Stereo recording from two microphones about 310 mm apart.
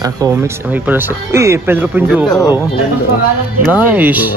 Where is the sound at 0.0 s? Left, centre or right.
Centre.